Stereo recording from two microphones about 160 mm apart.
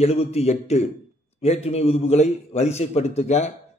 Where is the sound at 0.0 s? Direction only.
40° left (ahead or behind).